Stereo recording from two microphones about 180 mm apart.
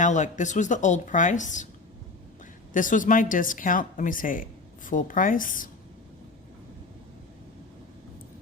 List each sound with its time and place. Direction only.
0.0 s a woman's voice: 45° left (ahead or behind)
2.7 s a woman's voice: 45° left (ahead or behind)